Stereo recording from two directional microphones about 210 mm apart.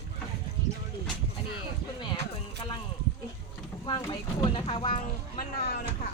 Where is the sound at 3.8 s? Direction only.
20° left (ahead or behind).